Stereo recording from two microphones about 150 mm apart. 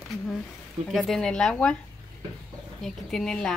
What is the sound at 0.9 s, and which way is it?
Speech, centre (ahead or behind).